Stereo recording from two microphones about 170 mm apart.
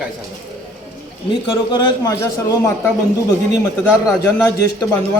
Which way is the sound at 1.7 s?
25° left (ahead or behind).